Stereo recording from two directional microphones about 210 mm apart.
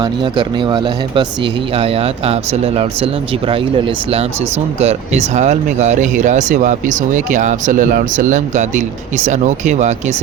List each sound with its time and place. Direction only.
0.0 s speech: 20° right (ahead or behind)